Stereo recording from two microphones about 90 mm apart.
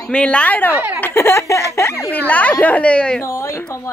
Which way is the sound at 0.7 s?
20° right (ahead or behind).